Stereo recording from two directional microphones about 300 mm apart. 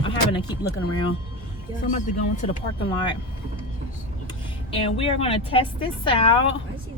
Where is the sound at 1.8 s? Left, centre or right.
Left.